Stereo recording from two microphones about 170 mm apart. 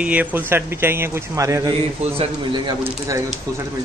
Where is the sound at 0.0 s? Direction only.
10° right (ahead or behind).